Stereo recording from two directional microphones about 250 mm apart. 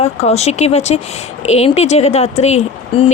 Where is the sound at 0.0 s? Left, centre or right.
Left.